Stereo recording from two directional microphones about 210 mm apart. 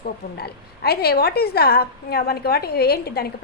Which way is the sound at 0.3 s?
50° left (ahead or behind).